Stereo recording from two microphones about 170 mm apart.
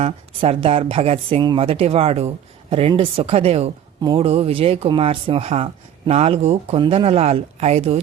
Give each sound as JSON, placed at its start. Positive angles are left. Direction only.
{"t": 0.0, "sound": "speech", "side_deg": -35}